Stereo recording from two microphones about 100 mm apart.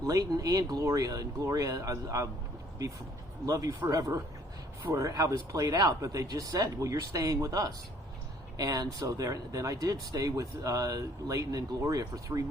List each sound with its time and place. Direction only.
0.0 s speech: 35° right (ahead or behind)
3.4 s speech: 35° right (ahead or behind)